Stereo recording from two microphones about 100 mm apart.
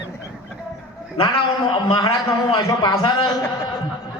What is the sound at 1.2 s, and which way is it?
A man's voice, 50° left (ahead or behind).